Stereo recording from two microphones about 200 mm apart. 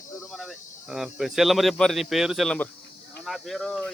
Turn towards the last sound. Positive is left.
turn(degrees=0)  # may be behind; listen again after turning